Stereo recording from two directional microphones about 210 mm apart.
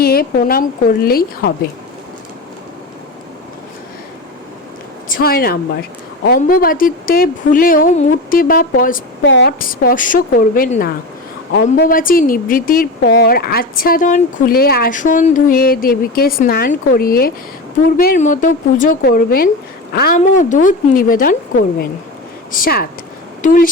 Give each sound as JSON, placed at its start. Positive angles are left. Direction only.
{"t": 0.0, "sound": "speech", "side_deg": 45}
{"t": 5.0, "sound": "speech", "side_deg": 45}
{"t": 9.2, "sound": "a woman's voice", "side_deg": 55}
{"t": 22.5, "sound": "speech", "side_deg": 45}